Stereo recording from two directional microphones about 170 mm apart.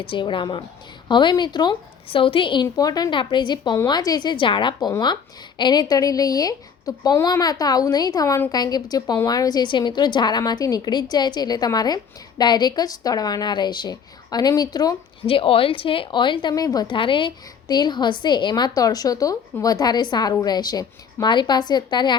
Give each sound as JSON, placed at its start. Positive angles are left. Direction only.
{"t": 0.0, "sound": "a woman's voice", "side_deg": 30}